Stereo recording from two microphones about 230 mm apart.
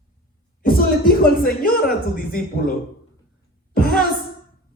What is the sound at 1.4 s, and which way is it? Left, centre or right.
Speech, left.